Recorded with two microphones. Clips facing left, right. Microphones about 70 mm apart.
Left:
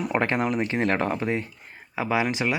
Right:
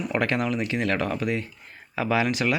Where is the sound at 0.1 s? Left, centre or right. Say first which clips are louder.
Even; left.